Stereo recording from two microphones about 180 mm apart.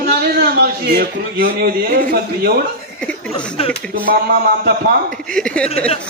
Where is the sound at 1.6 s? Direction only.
50° right (ahead or behind).